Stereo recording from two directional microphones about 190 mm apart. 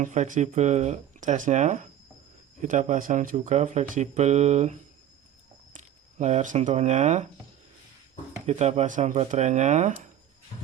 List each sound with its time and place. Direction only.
0.0 s speech: 40° right (ahead or behind)
8.4 s speech: 35° right (ahead or behind)